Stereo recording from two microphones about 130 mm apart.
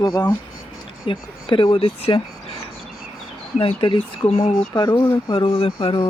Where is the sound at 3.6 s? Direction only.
45° left (ahead or behind).